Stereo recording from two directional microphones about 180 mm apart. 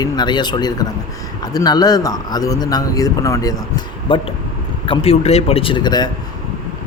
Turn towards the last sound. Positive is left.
turn(degrees=25)  # may be behind; listen again after turning